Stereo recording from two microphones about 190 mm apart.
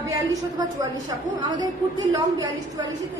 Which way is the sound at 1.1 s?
20° right (ahead or behind).